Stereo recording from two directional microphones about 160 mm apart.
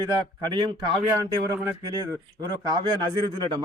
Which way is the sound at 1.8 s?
20° right (ahead or behind).